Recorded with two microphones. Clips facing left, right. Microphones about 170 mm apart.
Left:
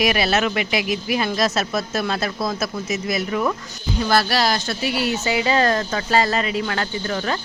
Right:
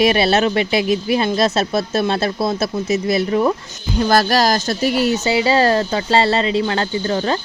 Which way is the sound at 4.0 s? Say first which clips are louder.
Right 4 dB; 45° right (ahead or behind).